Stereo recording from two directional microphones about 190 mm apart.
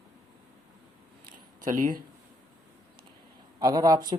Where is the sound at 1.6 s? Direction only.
45° right (ahead or behind).